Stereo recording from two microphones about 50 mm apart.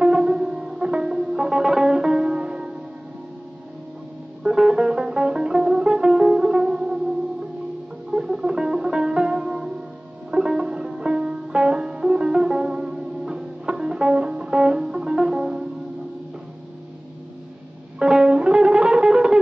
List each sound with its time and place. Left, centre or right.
0.0 s music: centre
4.4 s music: centre
8.1 s music: centre
17.9 s music: centre